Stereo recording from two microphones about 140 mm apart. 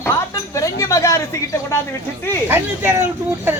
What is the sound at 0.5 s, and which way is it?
Speech, 25° left (ahead or behind).